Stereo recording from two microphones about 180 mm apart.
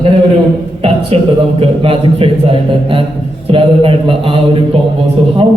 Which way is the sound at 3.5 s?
30° right (ahead or behind).